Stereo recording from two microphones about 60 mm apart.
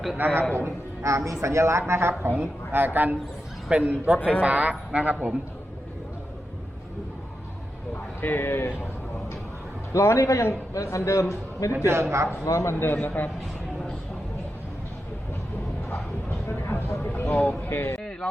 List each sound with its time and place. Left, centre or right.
0.2 s a woman's voice: right
0.5 s a man's voice: right
3.7 s speech: right
4.2 s a man's voice: left
4.4 s speech: centre
8.2 s speech: left
9.9 s a man's voice: left
11.9 s a man's voice: right
12.5 s a man's voice: left
12.8 s a man's voice: left
16.5 s a sound: left
17.7 s speech: left